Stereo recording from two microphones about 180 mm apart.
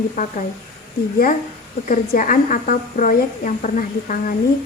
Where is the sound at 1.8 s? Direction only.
50° left (ahead or behind).